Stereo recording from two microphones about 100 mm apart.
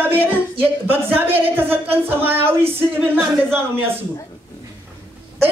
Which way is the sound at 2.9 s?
15° right (ahead or behind).